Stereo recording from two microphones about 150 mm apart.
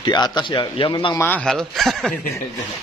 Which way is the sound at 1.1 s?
10° left (ahead or behind).